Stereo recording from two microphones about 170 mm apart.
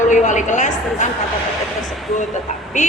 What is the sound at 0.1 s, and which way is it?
Speech, 45° left (ahead or behind).